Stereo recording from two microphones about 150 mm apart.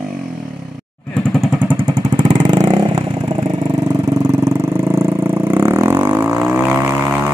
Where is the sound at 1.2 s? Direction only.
Centre (ahead or behind).